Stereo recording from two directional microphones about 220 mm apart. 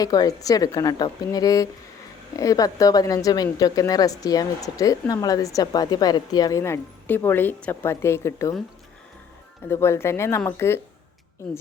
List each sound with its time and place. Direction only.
0.0 s speech: 15° left (ahead or behind)
9.6 s speech: 10° left (ahead or behind)